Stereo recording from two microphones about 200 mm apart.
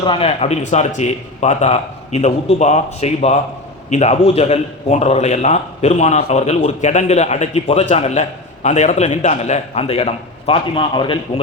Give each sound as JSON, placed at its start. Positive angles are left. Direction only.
{"t": 0.0, "sound": "a man's voice", "side_deg": 25}